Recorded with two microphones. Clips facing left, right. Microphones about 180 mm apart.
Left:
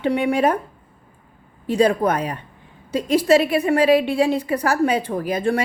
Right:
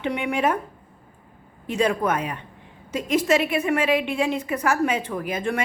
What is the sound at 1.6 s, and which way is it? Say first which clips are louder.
A woman's voice: left 5 dB; 35° left (ahead or behind).